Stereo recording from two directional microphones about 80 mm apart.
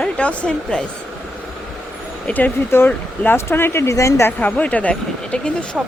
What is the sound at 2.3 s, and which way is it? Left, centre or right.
Speech, centre.